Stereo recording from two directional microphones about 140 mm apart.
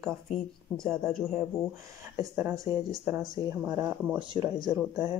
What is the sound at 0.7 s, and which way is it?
Speech, centre (ahead or behind).